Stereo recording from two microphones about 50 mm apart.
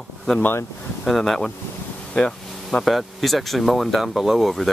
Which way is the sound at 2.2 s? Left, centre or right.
Centre.